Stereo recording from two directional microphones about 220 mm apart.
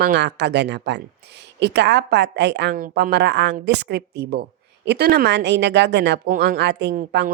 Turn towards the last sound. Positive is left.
turn(degrees=-40)  # may be behind; listen again after turning